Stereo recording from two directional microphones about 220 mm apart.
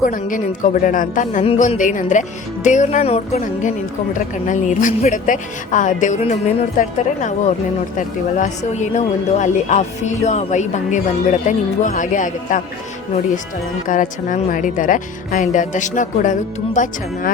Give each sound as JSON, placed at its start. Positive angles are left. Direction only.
{"t": 0.0, "sound": "speech", "side_deg": 40}
{"t": 13.8, "sound": "speech", "side_deg": 35}